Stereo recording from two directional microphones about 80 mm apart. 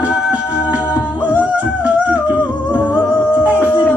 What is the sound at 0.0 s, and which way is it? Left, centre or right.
Music, centre.